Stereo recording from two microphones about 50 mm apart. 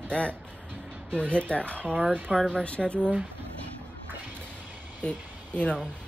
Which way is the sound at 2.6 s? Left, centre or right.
Left.